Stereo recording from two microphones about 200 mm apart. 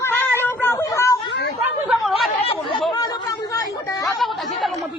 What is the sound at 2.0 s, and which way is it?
Chatter, centre (ahead or behind).